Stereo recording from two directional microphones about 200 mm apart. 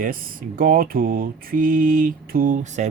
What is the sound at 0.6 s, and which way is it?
Mantra, 45° right (ahead or behind).